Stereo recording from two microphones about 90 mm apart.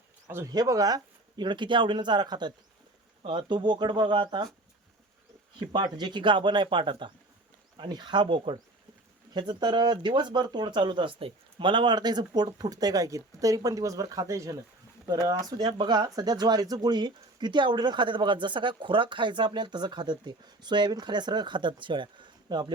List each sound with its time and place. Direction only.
0.5 s speech: 45° right (ahead or behind); by 4.4 s 60° right (ahead or behind)
5.5 s speech: 55° right (ahead or behind); by 8.5 s 70° right (ahead or behind)
9.3 s speech: 55° right (ahead or behind)